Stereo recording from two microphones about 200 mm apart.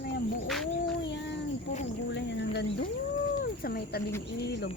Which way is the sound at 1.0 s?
60° left (ahead or behind).